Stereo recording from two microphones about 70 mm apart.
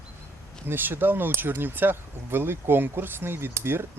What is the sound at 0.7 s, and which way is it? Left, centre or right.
Speech, right.